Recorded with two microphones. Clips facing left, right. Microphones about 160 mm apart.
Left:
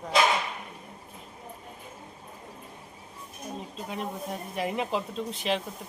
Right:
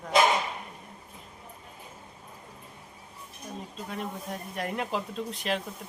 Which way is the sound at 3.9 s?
5° left (ahead or behind).